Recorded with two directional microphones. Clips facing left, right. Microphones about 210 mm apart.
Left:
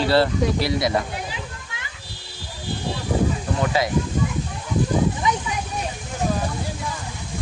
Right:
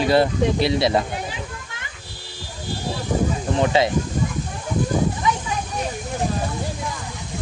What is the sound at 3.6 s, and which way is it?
Speech, 25° right (ahead or behind).